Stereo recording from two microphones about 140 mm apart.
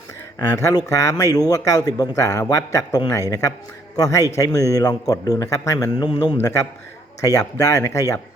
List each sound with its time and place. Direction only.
0.3 s speech: 25° left (ahead or behind)
7.2 s speech: 25° left (ahead or behind)